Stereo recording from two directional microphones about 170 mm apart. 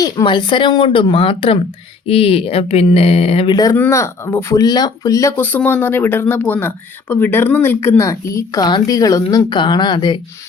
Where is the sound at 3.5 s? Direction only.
20° left (ahead or behind).